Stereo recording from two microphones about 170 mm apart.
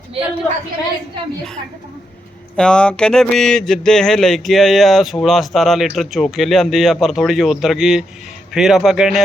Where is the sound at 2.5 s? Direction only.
5° left (ahead or behind).